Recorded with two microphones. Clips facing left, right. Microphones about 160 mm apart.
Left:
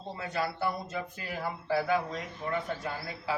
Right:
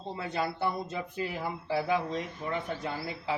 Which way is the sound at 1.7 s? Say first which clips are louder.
Even; 20° right (ahead or behind).